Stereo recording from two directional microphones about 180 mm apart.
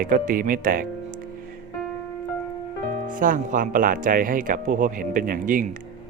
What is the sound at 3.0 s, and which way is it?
Speech, 50° right (ahead or behind).